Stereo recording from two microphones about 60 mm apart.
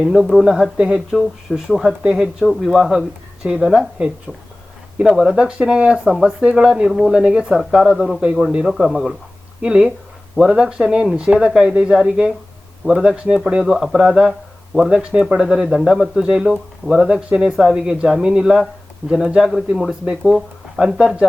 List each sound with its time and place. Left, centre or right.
0.0 s speech: centre
2.0 s speech: centre
2.4 s speech: centre
4.9 s speech: centre
5.4 s speech: centre
6.1 s speech: centre
6.4 s speech: centre
9.6 s speech: centre
10.3 s speech: centre
13.7 s speech: centre